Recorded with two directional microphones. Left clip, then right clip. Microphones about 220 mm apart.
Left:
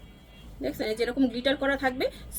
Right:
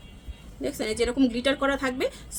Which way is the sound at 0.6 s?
20° right (ahead or behind).